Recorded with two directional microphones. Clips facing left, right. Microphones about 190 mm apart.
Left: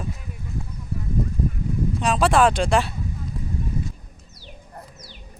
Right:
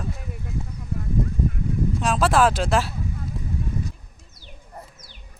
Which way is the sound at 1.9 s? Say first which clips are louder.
Left 1 dB; centre (ahead or behind).